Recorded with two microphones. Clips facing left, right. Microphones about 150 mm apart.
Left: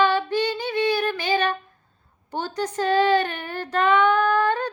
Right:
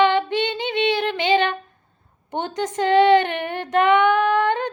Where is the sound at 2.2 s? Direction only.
20° right (ahead or behind).